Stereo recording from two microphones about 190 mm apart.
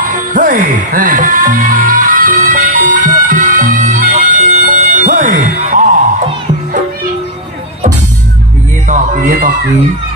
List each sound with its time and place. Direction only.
0.1 s music: 45° right (ahead or behind)
8.8 s music: 45° right (ahead or behind)